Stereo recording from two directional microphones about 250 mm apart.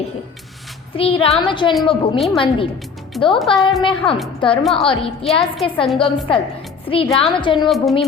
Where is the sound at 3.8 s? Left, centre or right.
Left.